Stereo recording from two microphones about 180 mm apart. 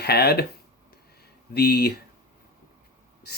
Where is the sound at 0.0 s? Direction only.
65° left (ahead or behind).